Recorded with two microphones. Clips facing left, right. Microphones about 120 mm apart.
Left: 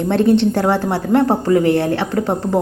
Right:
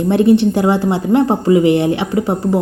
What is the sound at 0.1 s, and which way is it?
A woman's voice, 10° right (ahead or behind).